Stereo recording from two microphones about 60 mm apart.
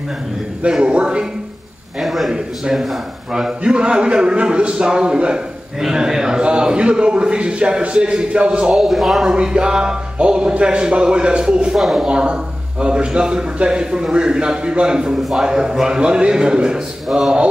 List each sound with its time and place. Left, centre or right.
0.7 s a man's voice: centre
2.0 s a man's voice: centre
8.7 s a man's voice: centre
9.2 s a man's voice: centre
11.8 s a man's voice: centre
12.1 s a man's voice: centre